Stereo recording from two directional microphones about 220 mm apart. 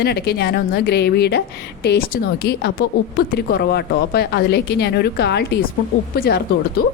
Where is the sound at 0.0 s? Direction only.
45° left (ahead or behind).